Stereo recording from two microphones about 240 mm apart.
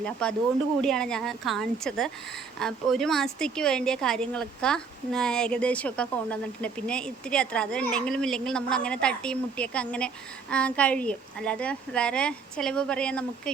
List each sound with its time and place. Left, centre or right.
0.0 s speech: centre